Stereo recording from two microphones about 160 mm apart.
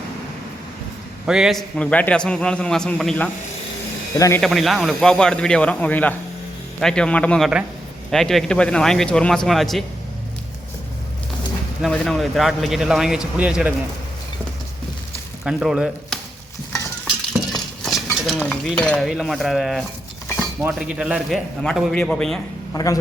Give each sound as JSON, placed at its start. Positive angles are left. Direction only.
{"t": 1.3, "sound": "speech", "side_deg": 0}
{"t": 4.4, "sound": "speech", "side_deg": 0}
{"t": 11.8, "sound": "speech", "side_deg": 0}
{"t": 15.4, "sound": "speech", "side_deg": -5}
{"t": 17.5, "sound": "cutlery", "side_deg": 0}
{"t": 20.7, "sound": "speech", "side_deg": -5}
{"t": 22.7, "sound": "a man's voice", "side_deg": 20}